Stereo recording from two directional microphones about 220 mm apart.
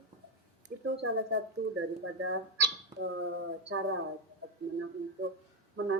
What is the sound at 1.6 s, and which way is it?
Speech, 50° right (ahead or behind).